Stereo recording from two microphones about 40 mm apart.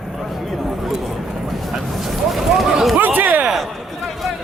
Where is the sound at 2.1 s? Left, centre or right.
Centre.